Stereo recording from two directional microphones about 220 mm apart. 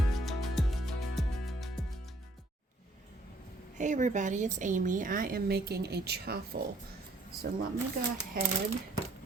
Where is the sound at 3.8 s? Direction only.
35° right (ahead or behind).